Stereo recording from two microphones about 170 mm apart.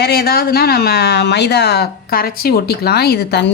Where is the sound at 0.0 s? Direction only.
70° left (ahead or behind).